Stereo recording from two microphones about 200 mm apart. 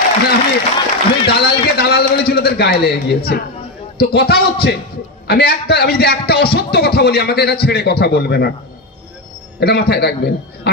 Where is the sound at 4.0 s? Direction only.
50° left (ahead or behind).